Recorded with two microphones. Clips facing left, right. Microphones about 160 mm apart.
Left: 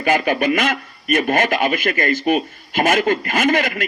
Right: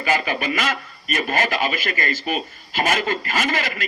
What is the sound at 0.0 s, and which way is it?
A man's voice, 50° left (ahead or behind).